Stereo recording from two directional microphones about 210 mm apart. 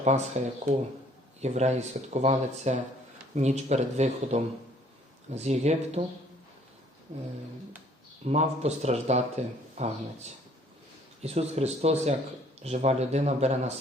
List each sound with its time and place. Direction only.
0.0 s speech: 35° right (ahead or behind)
7.1 s speech: 35° right (ahead or behind)